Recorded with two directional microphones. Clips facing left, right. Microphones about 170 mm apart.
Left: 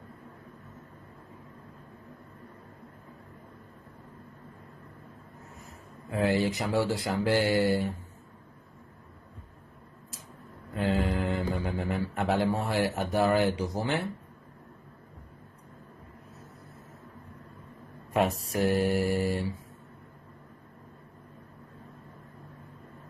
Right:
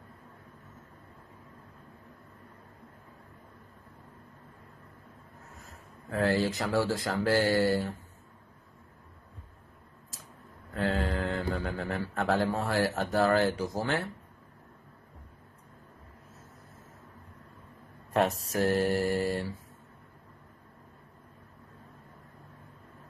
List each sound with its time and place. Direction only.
6.0 s speech: 15° left (ahead or behind)
10.7 s speech: 10° left (ahead or behind)
18.1 s a sound: 10° left (ahead or behind)
18.7 s speech: 15° left (ahead or behind)
19.0 s mantra: centre (ahead or behind)